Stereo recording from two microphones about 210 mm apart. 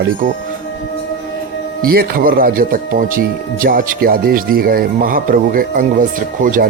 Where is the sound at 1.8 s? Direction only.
45° right (ahead or behind).